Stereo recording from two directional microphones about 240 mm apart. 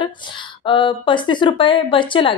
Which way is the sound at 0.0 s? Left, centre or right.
Centre.